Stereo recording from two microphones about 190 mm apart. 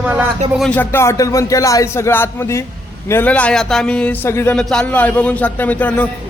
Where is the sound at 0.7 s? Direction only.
15° left (ahead or behind).